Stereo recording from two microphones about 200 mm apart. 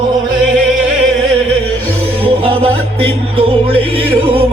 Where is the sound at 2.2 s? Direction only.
25° right (ahead or behind).